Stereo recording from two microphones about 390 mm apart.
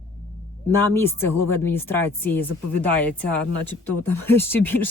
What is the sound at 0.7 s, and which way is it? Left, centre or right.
Speech, centre.